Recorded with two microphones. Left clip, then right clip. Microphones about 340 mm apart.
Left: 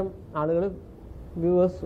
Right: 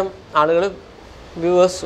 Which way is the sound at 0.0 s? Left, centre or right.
Centre.